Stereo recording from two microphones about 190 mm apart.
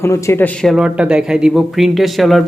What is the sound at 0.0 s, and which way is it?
Speech, 15° left (ahead or behind).